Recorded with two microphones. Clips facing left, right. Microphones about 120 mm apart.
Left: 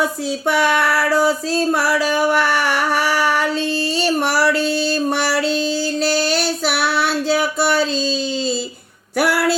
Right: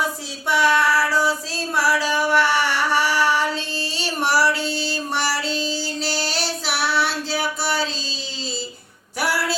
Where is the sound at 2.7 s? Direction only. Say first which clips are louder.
Left 2 dB; 50° left (ahead or behind).